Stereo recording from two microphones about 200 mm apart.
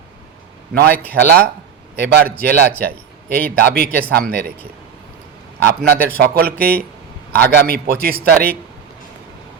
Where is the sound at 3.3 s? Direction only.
50° right (ahead or behind).